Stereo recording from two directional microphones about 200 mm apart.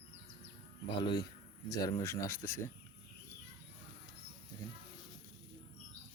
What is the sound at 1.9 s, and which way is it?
Speech, 15° left (ahead or behind).